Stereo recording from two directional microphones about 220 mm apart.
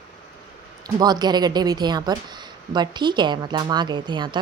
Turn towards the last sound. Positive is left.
turn(degrees=-20)  # may be behind; listen again after turning